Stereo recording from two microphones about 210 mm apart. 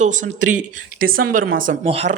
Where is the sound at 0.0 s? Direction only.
35° right (ahead or behind).